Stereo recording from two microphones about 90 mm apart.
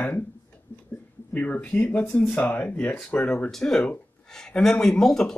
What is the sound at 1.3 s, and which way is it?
Speech, 15° left (ahead or behind).